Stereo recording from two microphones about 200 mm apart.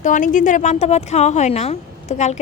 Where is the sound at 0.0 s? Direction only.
40° left (ahead or behind).